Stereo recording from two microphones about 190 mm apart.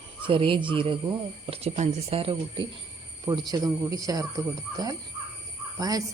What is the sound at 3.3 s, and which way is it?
Speech, 20° right (ahead or behind).